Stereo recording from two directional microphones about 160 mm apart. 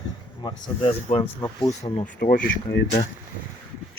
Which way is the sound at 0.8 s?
35° left (ahead or behind).